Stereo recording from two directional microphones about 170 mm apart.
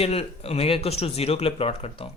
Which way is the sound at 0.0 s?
35° left (ahead or behind).